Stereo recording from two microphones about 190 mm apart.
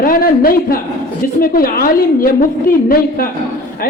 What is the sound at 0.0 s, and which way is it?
A man's voice, 50° left (ahead or behind).